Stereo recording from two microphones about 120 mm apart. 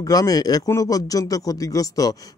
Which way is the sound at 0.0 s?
30° left (ahead or behind).